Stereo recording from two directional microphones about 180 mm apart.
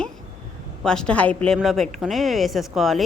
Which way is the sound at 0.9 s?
5° left (ahead or behind).